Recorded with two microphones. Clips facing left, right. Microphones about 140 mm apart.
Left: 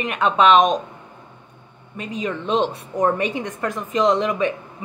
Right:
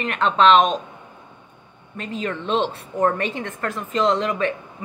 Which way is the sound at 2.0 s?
15° left (ahead or behind).